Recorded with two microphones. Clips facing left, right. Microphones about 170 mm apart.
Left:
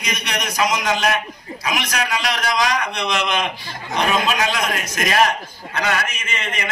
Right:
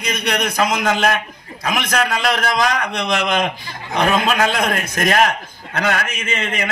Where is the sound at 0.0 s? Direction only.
55° right (ahead or behind).